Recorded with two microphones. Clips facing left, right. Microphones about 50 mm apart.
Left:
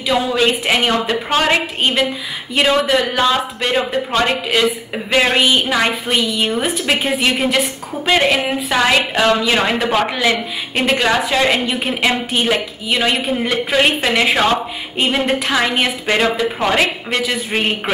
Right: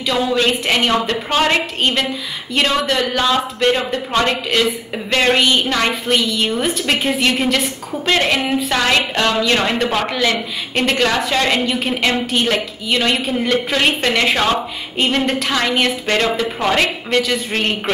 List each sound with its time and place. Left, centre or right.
0.0 s a woman's voice: centre